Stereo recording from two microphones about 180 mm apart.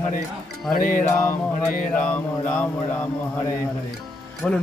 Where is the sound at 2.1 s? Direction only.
10° left (ahead or behind).